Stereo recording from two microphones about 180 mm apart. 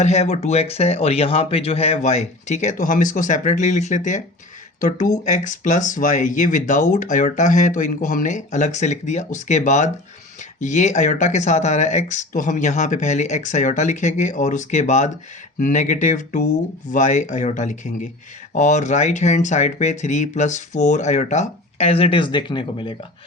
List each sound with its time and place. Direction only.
0.0 s speech: 40° left (ahead or behind)